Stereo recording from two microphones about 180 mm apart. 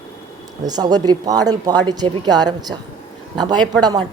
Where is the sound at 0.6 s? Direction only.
20° right (ahead or behind).